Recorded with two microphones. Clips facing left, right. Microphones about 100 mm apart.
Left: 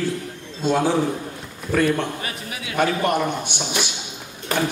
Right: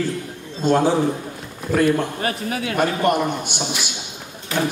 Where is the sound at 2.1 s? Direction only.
45° right (ahead or behind).